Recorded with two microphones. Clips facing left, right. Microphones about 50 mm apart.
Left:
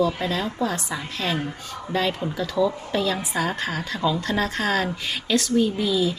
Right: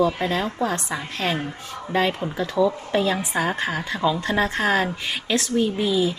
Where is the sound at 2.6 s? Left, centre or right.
Centre.